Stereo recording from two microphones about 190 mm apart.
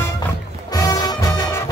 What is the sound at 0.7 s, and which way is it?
Music, 15° left (ahead or behind).